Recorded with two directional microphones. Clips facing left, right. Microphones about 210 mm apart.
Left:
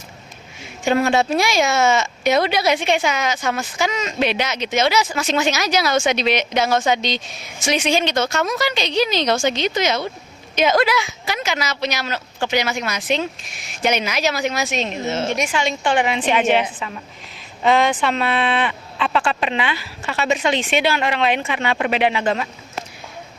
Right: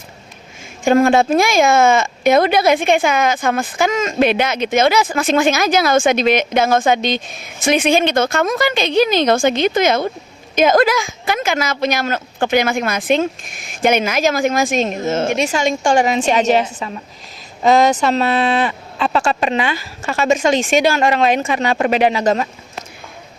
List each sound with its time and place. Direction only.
0.9 s speech: 50° right (ahead or behind)